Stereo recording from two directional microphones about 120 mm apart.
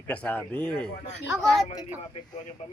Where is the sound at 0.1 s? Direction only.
10° left (ahead or behind).